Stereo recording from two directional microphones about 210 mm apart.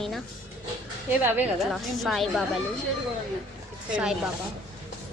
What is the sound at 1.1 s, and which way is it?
A woman's voice, 10° right (ahead or behind).